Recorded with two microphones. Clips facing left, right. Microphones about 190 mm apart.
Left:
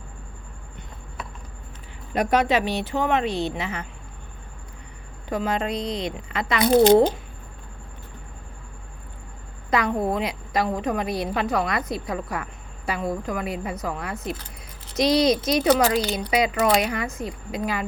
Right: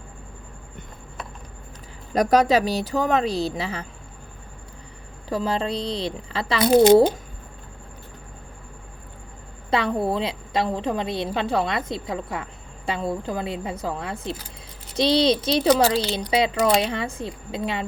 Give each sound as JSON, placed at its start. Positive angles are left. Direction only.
{"t": 2.1, "sound": "speech", "side_deg": -40}
{"t": 5.3, "sound": "speech", "side_deg": -30}
{"t": 9.6, "sound": "a woman's voice", "side_deg": -30}